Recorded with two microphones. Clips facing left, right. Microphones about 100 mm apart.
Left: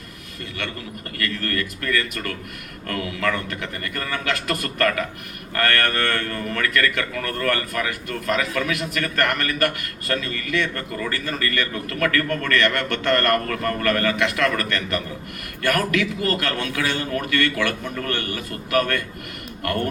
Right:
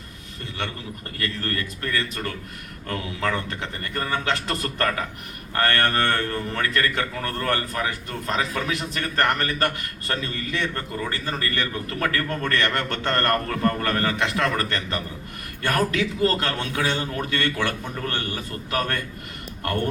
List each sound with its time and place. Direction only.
1.2 s a man's voice: 25° right (ahead or behind)